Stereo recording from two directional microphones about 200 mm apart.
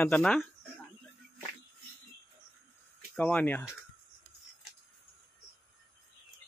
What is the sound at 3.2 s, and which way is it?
Speech, 10° left (ahead or behind).